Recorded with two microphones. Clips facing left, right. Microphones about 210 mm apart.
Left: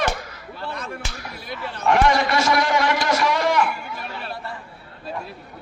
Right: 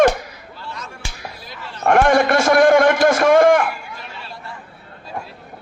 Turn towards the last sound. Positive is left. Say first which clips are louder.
# right 8 dB
turn(degrees=-50)  # may be behind; listen again after turning